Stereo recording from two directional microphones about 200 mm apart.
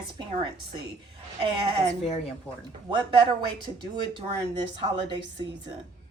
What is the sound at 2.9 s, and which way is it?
Speech, 20° right (ahead or behind).